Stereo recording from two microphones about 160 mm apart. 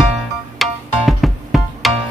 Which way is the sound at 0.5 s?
Centre (ahead or behind).